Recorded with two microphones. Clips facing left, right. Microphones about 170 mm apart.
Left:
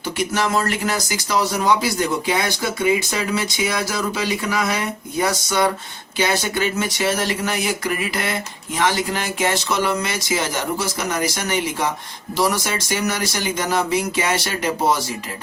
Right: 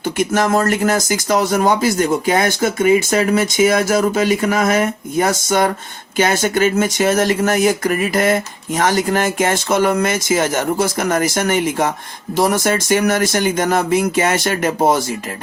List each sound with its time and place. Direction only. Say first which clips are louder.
0.0 s speech: right 5 dB; 45° right (ahead or behind)